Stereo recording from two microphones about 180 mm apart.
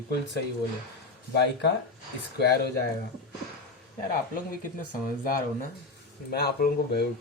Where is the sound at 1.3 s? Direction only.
70° left (ahead or behind).